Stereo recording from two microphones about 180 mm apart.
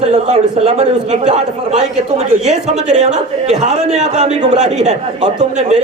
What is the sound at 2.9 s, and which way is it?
A man's voice, 40° right (ahead or behind).